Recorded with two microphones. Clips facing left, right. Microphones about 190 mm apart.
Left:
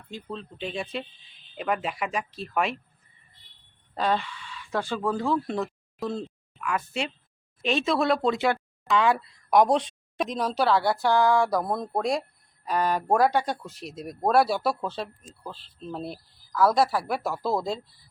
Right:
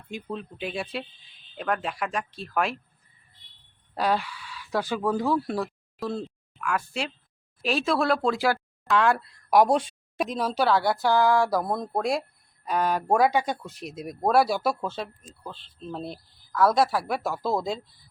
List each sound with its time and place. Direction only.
0.1 s speech: 15° right (ahead or behind)
3.9 s speech: 5° right (ahead or behind)
13.7 s speech: 35° left (ahead or behind)
14.0 s speech: 5° right (ahead or behind)